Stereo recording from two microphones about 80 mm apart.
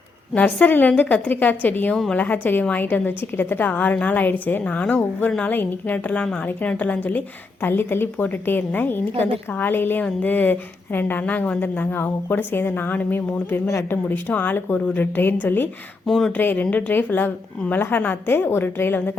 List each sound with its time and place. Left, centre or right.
0.3 s a woman's voice: centre
16.0 s speech: centre
16.3 s a woman's voice: left